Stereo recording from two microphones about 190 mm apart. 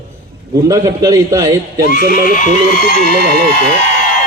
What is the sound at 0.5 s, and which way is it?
A man's voice, 20° right (ahead or behind).